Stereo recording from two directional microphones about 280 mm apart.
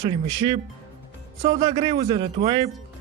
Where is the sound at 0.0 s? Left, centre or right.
Centre.